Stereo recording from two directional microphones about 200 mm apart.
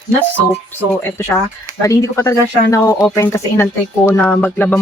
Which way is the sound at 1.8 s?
15° left (ahead or behind).